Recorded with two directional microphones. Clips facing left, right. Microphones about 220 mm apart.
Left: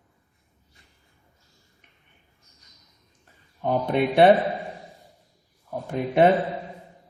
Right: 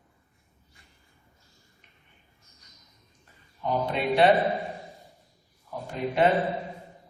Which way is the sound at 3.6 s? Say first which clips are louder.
Left 5 dB; 55° left (ahead or behind).